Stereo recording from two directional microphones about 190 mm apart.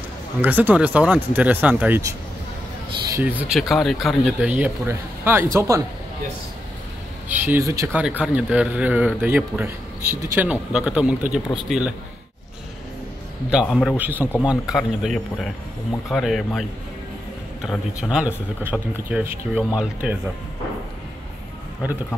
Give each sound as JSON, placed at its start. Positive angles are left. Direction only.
{"t": 0.4, "sound": "speech", "side_deg": -10}
{"t": 3.2, "sound": "speech", "side_deg": -10}
{"t": 7.2, "sound": "speech", "side_deg": -10}
{"t": 8.2, "sound": "speech", "side_deg": -5}
{"t": 13.7, "sound": "speech", "side_deg": 5}
{"t": 13.9, "sound": "speech", "side_deg": -10}